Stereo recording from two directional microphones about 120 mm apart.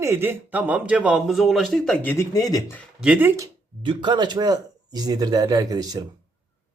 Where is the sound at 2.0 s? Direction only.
15° left (ahead or behind).